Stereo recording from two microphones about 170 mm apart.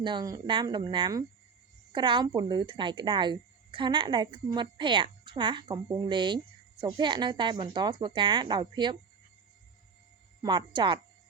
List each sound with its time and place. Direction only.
0.0 s speech: 25° right (ahead or behind)
10.4 s speech: 25° right (ahead or behind)